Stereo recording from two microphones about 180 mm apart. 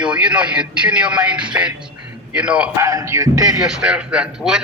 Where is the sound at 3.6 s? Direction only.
5° right (ahead or behind).